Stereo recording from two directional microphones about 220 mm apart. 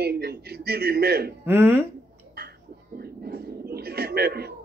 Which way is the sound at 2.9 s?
45° right (ahead or behind).